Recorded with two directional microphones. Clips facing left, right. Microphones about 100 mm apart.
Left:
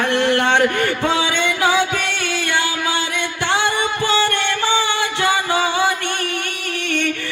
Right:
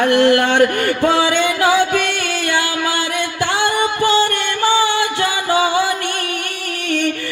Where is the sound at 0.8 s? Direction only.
45° right (ahead or behind).